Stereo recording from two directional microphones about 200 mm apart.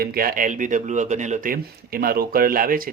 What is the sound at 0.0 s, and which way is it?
Speech, 50° right (ahead or behind).